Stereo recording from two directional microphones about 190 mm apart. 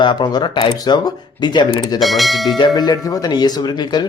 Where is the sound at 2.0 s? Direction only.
Centre (ahead or behind).